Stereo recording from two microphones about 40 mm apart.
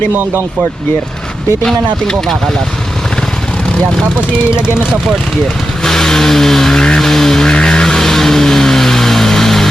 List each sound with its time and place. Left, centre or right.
0.1 s speech: right
1.6 s speech: centre
5.8 s vehicle: centre
6.7 s vehicle: centre
7.0 s speech: centre
7.5 s vehicle: left